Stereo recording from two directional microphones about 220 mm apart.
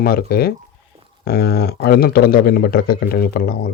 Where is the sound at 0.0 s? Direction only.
45° left (ahead or behind).